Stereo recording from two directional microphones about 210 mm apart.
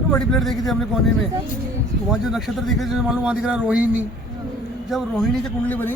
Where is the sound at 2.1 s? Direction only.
Centre (ahead or behind).